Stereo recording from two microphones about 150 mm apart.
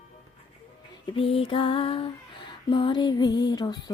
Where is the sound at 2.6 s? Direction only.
35° left (ahead or behind).